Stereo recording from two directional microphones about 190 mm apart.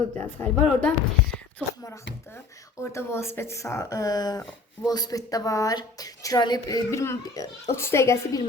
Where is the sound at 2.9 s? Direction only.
15° left (ahead or behind).